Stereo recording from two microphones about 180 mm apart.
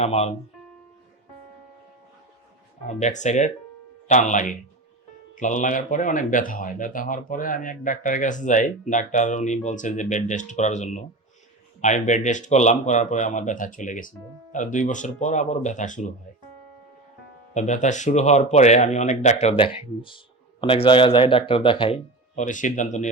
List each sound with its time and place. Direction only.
0.0 s speech: 35° left (ahead or behind)
2.8 s speech: 40° left (ahead or behind)
17.5 s speech: 40° left (ahead or behind)